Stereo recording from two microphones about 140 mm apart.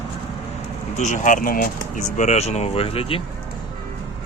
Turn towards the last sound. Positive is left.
turn(degrees=45)  # may be behind; listen again after turning